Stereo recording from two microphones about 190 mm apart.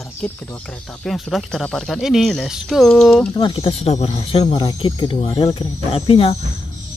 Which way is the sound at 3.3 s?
25° left (ahead or behind).